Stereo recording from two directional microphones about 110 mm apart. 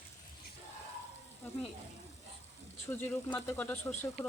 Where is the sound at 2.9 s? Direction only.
15° left (ahead or behind).